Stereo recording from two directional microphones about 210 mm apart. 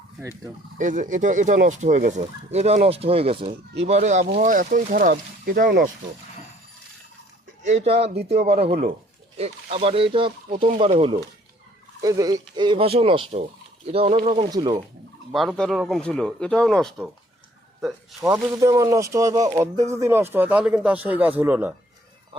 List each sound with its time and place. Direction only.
0.2 s speech: 10° right (ahead or behind)
0.8 s speech: 35° right (ahead or behind)
7.6 s speech: 30° right (ahead or behind)
9.4 s speech: 30° right (ahead or behind)
15.3 s speech: centre (ahead or behind)
18.2 s speech: 15° right (ahead or behind)